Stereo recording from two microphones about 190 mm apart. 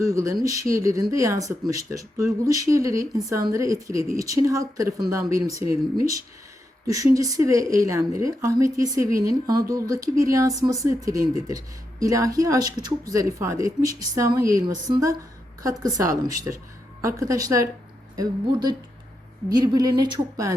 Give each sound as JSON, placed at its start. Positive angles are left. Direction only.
{"t": 0.0, "sound": "a woman's voice", "side_deg": -15}
{"t": 5.5, "sound": "speech", "side_deg": 35}
{"t": 6.8, "sound": "a woman's voice", "side_deg": -15}